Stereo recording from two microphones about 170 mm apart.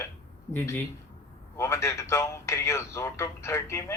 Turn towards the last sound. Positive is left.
turn(degrees=15)  # may be behind; listen again after turning